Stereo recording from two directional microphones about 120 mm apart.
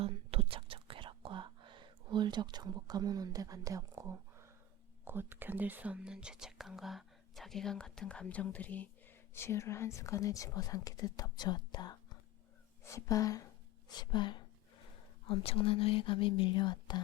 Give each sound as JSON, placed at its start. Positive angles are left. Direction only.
{"t": 0.0, "sound": "whispering", "side_deg": -55}
{"t": 5.0, "sound": "speech", "side_deg": -15}
{"t": 12.8, "sound": "speech", "side_deg": 25}